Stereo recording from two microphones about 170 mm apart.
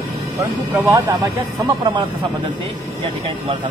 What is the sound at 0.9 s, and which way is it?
Speech, 20° right (ahead or behind).